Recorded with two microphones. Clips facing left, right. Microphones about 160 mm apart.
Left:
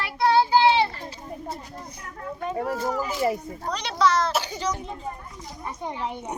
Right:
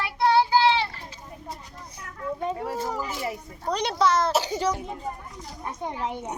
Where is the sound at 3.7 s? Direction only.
50° right (ahead or behind).